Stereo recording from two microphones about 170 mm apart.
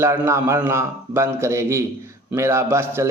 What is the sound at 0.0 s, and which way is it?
A man's voice, 15° right (ahead or behind).